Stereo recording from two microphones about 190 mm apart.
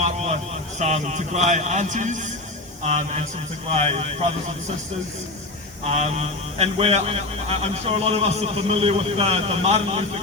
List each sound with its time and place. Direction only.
0.0 s a sound: 35° right (ahead or behind)
0.8 s a man's voice: 35° right (ahead or behind)
3.7 s a man's voice: 30° right (ahead or behind)
5.8 s a man's voice: 35° right (ahead or behind)